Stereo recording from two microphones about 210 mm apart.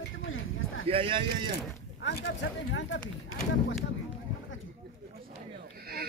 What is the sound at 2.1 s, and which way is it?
Speech, 55° left (ahead or behind).